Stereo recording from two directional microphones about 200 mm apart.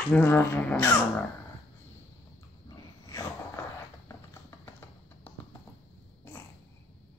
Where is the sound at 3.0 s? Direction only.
15° left (ahead or behind).